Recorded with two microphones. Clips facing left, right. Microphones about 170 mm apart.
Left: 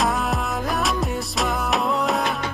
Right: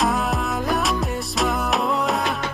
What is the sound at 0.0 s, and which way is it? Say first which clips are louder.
Music: right 1 dB; centre (ahead or behind).